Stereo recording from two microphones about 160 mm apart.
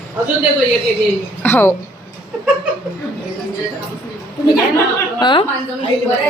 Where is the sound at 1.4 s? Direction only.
15° left (ahead or behind).